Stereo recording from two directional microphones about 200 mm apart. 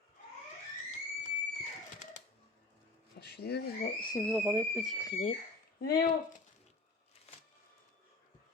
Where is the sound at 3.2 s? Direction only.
55° left (ahead or behind).